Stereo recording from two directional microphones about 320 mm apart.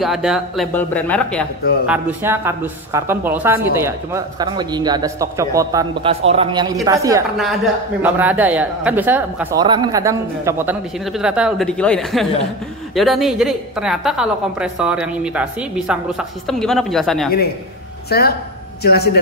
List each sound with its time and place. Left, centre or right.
0.0 s a woman's voice: centre
18.1 s speech: left